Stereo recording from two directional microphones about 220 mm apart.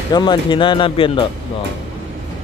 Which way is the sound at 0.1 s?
20° left (ahead or behind).